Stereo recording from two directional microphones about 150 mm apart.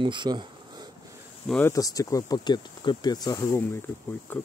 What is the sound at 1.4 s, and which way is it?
Speech, 5° left (ahead or behind).